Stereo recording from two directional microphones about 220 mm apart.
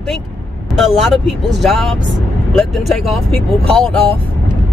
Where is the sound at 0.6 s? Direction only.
Centre (ahead or behind).